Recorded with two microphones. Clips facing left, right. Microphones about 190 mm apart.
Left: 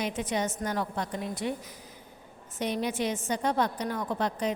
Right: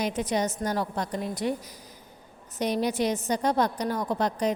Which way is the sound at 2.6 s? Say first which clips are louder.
Right 4 dB; 40° right (ahead or behind).